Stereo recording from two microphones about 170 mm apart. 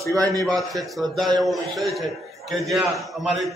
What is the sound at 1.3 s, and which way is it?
A man's voice, centre (ahead or behind).